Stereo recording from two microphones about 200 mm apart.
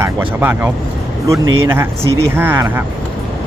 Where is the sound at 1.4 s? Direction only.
90° right.